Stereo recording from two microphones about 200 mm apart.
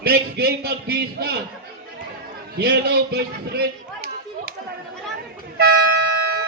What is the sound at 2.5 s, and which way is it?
Speech, 50° right (ahead or behind).